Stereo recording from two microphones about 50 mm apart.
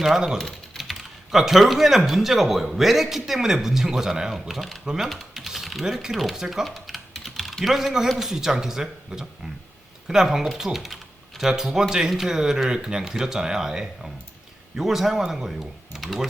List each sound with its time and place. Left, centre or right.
0.0 s speech: centre
0.3 s typing: centre
0.8 s speech: centre
5.0 s typing: centre
5.8 s speech: centre
6.7 s typing: centre
7.6 s speech: centre